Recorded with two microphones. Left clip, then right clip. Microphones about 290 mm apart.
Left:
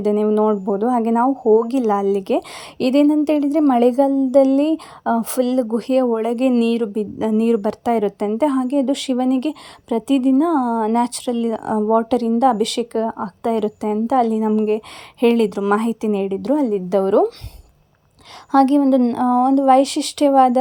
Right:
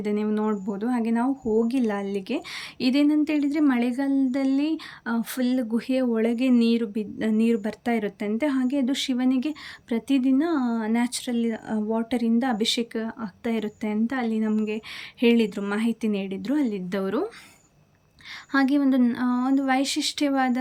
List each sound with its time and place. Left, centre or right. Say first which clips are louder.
0.0 s a woman's voice: left 10 dB; centre
1.6 s a woman's voice: left 9 dB; centre
10.5 s speech: left 8 dB; left
10.8 s a woman's voice: left 8 dB; centre
18.5 s a woman's voice: left 8 dB; centre